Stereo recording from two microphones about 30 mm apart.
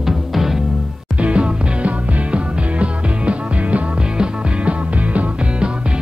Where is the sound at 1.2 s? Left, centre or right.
Right.